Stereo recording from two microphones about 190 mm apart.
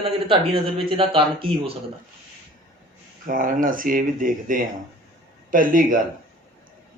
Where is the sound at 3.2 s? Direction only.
45° right (ahead or behind).